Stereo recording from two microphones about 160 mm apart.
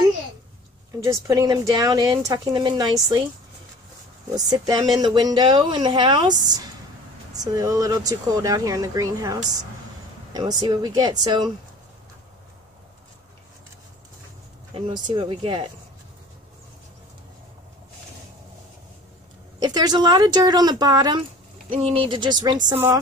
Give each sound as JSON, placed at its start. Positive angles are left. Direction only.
{"t": 1.2, "sound": "speech", "side_deg": -20}
{"t": 4.4, "sound": "speech", "side_deg": -25}
{"t": 14.7, "sound": "speech", "side_deg": -35}
{"t": 19.6, "sound": "speech", "side_deg": -25}